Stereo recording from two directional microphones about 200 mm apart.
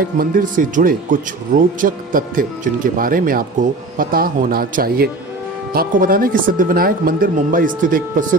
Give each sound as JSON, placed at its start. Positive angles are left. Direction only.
{"t": 0.2, "sound": "speech", "side_deg": -40}